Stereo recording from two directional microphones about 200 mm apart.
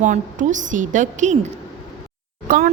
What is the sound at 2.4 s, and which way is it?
Speech, 45° right (ahead or behind).